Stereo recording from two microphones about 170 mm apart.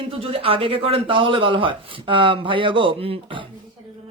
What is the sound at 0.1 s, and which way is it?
Speech, 35° right (ahead or behind).